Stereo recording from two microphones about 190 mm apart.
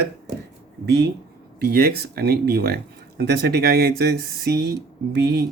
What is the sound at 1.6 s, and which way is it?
Speech, 55° right (ahead or behind).